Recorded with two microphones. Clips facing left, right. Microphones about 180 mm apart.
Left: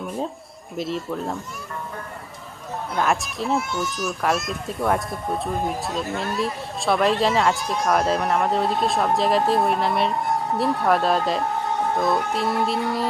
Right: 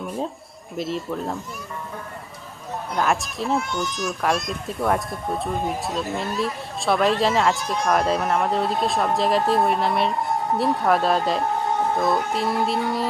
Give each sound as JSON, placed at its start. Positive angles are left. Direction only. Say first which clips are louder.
{"t": 0.8, "sound": "speech", "louder": "even", "side_deg": 0}
{"t": 2.9, "sound": "speech", "louder": "even", "side_deg": 0}